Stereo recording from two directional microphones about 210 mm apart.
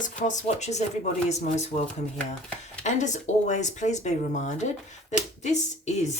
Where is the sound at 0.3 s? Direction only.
35° left (ahead or behind).